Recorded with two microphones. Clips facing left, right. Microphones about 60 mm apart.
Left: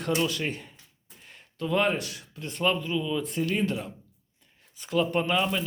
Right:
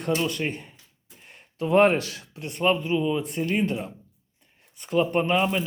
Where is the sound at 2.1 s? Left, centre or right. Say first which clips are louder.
Right 2 dB; right.